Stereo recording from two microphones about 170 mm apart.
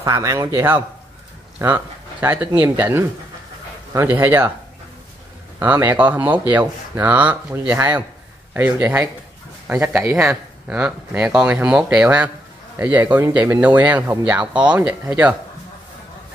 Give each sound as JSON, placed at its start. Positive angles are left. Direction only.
{"t": 0.0, "sound": "a man's voice", "side_deg": -20}
{"t": 5.6, "sound": "speech", "side_deg": -10}